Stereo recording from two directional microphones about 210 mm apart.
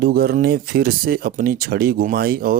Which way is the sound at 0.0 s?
45° right (ahead or behind).